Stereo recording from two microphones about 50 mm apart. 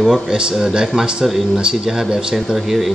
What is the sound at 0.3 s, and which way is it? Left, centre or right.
Speech, centre.